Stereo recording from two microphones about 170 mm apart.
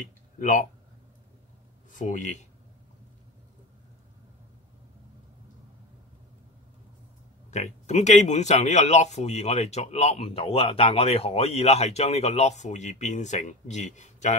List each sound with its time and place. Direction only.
0.4 s speech: 50° left (ahead or behind)
1.9 s speech: 50° left (ahead or behind)
7.5 s speech: 45° left (ahead or behind)